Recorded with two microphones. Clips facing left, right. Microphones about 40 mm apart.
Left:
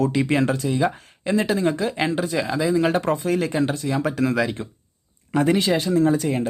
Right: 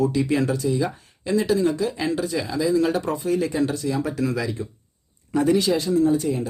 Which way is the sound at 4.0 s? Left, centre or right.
Left.